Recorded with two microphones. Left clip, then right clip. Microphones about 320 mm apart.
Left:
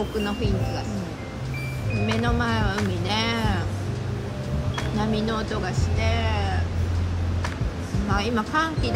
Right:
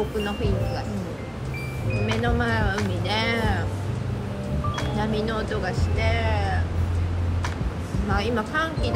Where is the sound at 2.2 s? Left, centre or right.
Centre.